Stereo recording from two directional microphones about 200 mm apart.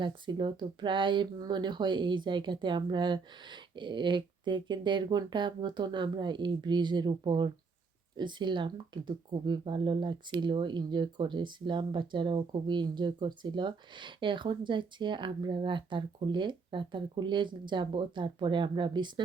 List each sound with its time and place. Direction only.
0.0 s speech: 25° right (ahead or behind)